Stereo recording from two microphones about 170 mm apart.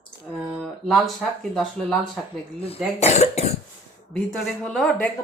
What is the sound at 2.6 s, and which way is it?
Speech, 35° left (ahead or behind).